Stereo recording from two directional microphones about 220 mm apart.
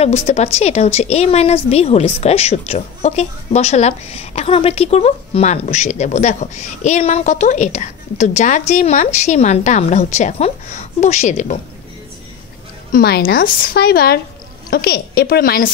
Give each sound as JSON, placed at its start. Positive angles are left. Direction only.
{"t": 0.0, "sound": "a woman's voice", "side_deg": 30}
{"t": 12.9, "sound": "speech", "side_deg": 45}